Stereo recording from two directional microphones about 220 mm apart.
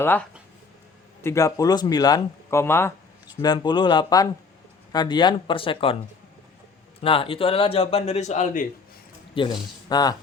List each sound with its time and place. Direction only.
0.0 s speech: 10° left (ahead or behind); by 6.0 s 25° left (ahead or behind)
7.0 s speech: 25° left (ahead or behind)